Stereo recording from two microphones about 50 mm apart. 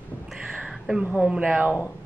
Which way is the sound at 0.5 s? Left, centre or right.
Centre.